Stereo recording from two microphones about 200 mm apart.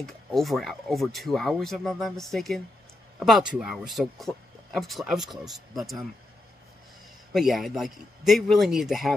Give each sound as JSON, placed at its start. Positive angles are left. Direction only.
{"t": 0.0, "sound": "speech", "side_deg": 0}
{"t": 7.3, "sound": "speech", "side_deg": 0}